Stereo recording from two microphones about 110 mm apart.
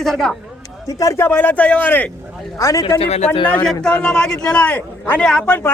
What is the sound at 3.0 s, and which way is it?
Speech, 85° left.